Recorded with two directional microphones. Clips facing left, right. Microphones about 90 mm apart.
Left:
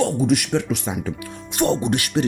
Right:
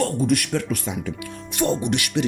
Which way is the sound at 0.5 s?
25° left (ahead or behind).